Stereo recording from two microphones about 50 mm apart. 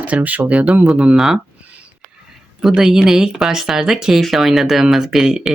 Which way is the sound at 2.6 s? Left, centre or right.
Centre.